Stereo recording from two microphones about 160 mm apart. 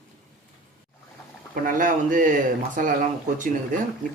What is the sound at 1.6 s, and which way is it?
Speech, 55° right (ahead or behind).